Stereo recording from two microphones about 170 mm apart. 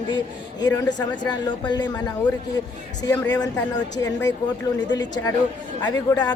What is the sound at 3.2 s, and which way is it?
Speech, 20° left (ahead or behind).